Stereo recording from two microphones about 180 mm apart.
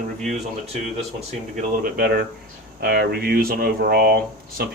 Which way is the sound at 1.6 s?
55° right (ahead or behind).